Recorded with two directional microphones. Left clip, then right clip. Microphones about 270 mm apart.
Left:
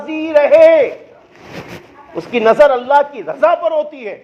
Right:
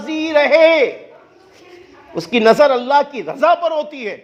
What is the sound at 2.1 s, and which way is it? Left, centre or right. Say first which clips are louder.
A man's voice: even; right.